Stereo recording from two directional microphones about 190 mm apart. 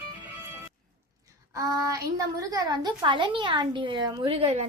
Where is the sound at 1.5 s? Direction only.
20° right (ahead or behind).